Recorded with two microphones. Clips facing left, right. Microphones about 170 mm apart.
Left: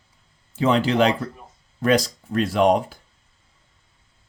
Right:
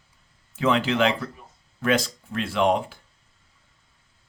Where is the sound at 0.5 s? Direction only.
30° left (ahead or behind).